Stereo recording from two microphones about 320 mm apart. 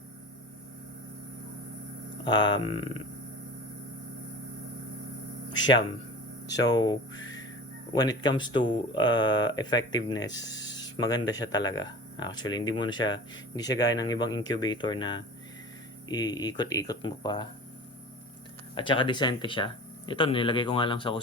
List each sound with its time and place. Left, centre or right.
2.2 s speech: centre
2.7 s speech: left
6.7 s speech: centre
18.7 s speech: centre